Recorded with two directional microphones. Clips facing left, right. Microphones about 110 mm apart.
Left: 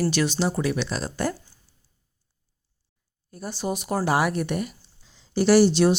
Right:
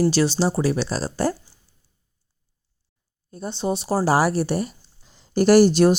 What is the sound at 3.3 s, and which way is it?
Speech, 25° right (ahead or behind).